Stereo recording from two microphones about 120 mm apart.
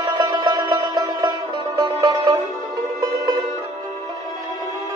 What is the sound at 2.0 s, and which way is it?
Music, 30° right (ahead or behind).